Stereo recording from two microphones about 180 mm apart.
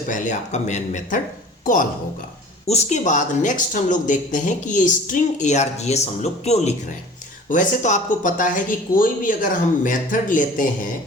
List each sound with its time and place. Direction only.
0.1 s a man's voice: 45° left (ahead or behind)